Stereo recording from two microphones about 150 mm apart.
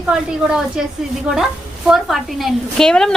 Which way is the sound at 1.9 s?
Centre (ahead or behind).